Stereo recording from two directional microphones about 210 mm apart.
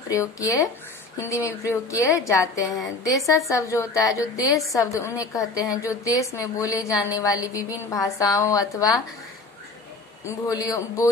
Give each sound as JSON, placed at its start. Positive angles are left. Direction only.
{"t": 0.1, "sound": "a woman's voice", "side_deg": 15}
{"t": 10.2, "sound": "a woman's voice", "side_deg": 15}